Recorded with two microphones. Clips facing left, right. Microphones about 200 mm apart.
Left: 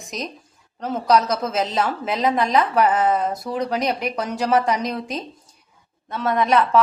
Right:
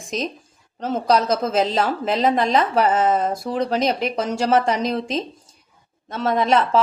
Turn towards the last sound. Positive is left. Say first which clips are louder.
# even
turn(degrees=-30)  # may be behind; listen again after turning